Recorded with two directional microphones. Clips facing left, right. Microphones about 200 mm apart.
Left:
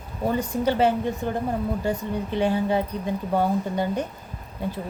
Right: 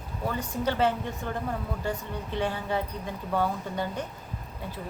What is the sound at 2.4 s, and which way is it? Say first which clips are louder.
Speech: left 7 dB; 15° left (ahead or behind).